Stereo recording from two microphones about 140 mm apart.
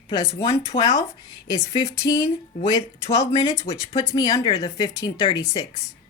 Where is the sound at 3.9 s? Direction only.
30° left (ahead or behind).